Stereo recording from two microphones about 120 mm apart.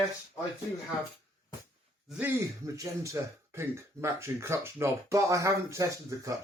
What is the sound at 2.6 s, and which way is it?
Speech, 25° right (ahead or behind).